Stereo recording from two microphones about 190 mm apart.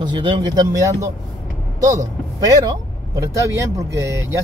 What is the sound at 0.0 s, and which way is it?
Speech, 25° right (ahead or behind).